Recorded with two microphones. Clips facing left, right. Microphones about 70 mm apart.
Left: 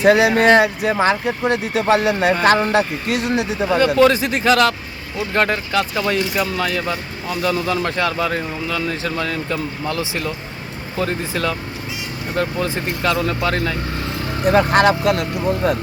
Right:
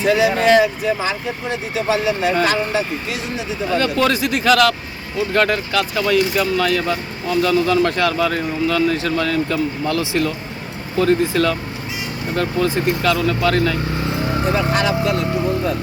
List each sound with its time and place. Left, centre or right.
0.0 s speech: left
3.7 s speech: centre
8.6 s speech: centre
12.6 s speech: left
14.4 s speech: left